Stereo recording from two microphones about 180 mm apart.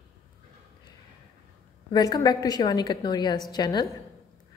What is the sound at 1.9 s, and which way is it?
A woman's voice, 20° left (ahead or behind).